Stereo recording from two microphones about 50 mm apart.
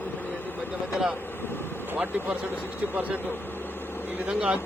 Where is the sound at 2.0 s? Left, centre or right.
Right.